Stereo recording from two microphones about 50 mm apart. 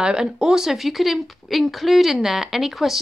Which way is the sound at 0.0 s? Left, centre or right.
Centre.